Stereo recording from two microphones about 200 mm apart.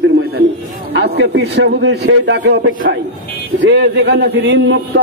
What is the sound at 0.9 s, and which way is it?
A man's voice, 60° right (ahead or behind).